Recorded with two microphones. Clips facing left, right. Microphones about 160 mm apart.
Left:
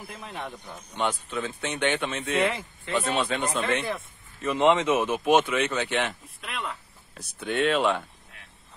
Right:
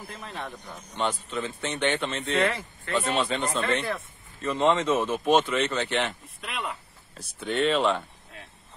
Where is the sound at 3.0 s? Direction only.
Centre (ahead or behind).